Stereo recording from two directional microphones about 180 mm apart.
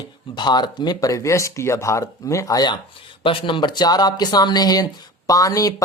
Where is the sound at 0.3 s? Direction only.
25° left (ahead or behind).